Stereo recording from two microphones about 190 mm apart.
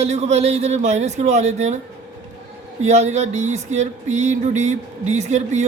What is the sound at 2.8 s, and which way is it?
Music, 35° right (ahead or behind).